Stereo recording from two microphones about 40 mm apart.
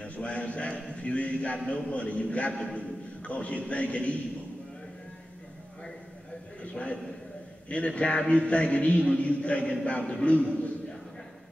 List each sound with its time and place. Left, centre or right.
0.0 s a man's voice: left
6.6 s a sound: left
7.7 s a man's voice: left